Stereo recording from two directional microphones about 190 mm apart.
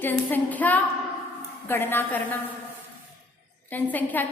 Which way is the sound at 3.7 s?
10° left (ahead or behind).